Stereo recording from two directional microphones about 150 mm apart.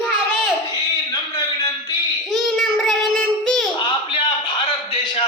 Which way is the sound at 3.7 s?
35° left (ahead or behind).